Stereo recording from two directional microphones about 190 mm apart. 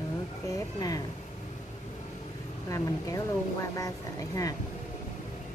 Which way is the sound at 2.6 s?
15° left (ahead or behind).